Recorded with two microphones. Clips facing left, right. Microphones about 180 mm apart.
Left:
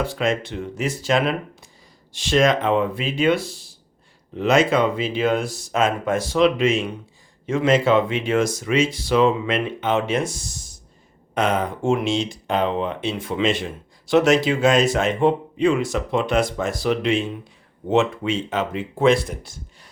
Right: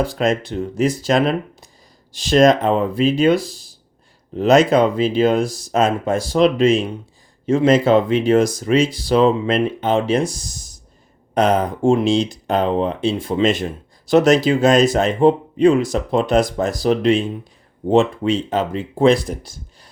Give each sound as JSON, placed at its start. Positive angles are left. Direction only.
{"t": 0.0, "sound": "speech", "side_deg": -40}